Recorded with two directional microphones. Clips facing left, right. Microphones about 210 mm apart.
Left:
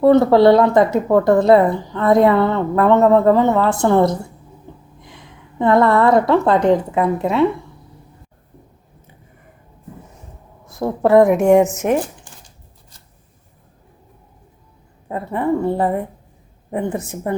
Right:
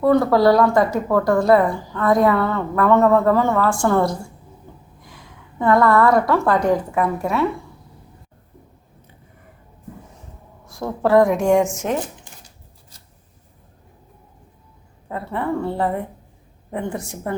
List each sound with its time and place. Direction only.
0.0 s a woman's voice: 25° left (ahead or behind)
5.5 s a woman's voice: 25° left (ahead or behind)
10.7 s a woman's voice: 20° left (ahead or behind)
15.1 s a woman's voice: 15° left (ahead or behind)